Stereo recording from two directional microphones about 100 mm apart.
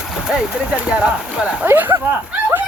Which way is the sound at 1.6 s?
20° right (ahead or behind).